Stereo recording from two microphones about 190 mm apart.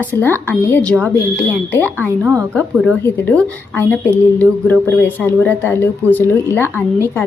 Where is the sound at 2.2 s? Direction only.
15° right (ahead or behind).